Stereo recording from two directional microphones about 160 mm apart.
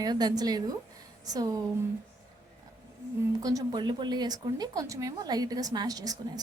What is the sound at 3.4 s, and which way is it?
Speech, 20° right (ahead or behind).